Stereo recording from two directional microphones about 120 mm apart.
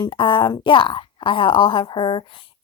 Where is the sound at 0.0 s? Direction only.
45° left (ahead or behind).